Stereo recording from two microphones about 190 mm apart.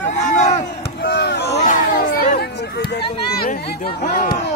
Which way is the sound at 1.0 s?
60° left (ahead or behind).